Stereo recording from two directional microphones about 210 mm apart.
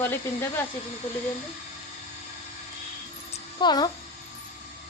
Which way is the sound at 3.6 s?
20° left (ahead or behind).